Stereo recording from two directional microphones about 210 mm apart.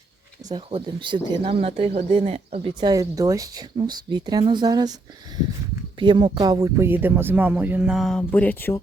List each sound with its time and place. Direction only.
0.4 s speech: 20° right (ahead or behind)
6.0 s speech: 25° right (ahead or behind); by 8.8 s 10° left (ahead or behind)